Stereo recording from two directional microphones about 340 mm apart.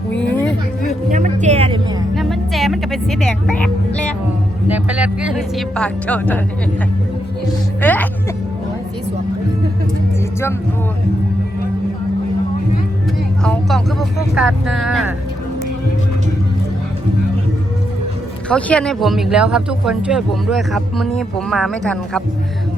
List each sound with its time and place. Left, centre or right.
0.1 s music: centre
1.1 s music: right
2.1 s music: centre
4.7 s a woman's voice: centre
7.8 s music: centre
13.4 s speech: centre
18.4 s speech: centre